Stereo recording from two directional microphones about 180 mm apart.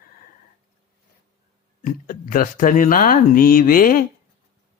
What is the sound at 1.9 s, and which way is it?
Speech, 50° left (ahead or behind).